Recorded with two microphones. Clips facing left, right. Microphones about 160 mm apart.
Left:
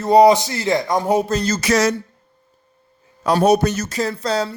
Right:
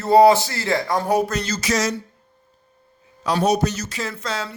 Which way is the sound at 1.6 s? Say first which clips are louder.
Left 5 dB; 65° left (ahead or behind).